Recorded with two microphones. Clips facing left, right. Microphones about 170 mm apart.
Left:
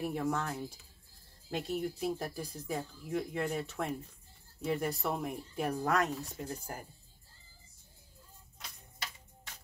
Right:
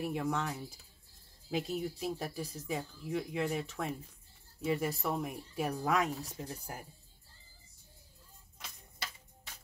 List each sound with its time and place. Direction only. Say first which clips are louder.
0.0 s speech: left 1 dB; centre (ahead or behind)